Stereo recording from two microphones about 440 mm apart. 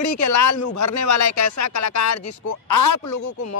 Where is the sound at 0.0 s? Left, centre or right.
Left.